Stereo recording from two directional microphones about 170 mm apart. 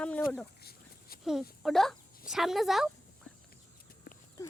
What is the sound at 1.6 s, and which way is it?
Speech, centre (ahead or behind).